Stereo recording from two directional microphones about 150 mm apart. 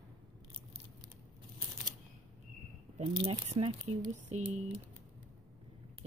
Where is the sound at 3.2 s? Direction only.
40° right (ahead or behind).